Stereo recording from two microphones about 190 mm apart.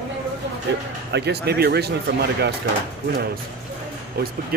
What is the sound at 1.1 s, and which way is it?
Speech, 60° right (ahead or behind).